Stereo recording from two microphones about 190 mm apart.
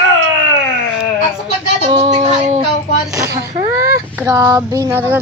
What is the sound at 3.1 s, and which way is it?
Speech, 15° right (ahead or behind).